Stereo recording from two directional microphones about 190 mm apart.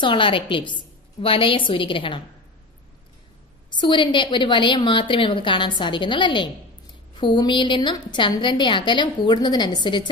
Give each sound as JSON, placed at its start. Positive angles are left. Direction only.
{"t": 0.0, "sound": "a woman's voice", "side_deg": 25}
{"t": 3.7, "sound": "a woman's voice", "side_deg": 25}